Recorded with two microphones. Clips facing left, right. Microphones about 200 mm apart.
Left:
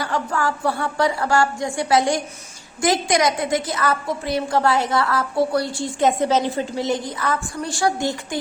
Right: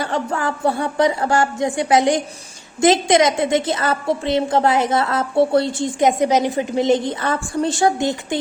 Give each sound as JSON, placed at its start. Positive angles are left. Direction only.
{"t": 0.0, "sound": "a woman's voice", "side_deg": -25}